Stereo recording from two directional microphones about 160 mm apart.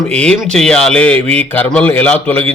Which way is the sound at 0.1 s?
5° left (ahead or behind).